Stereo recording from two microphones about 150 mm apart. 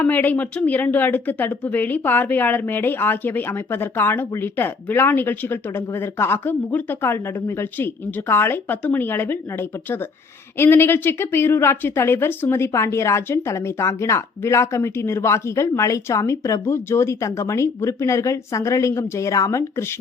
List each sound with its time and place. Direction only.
0.0 s a woman's voice: 10° left (ahead or behind)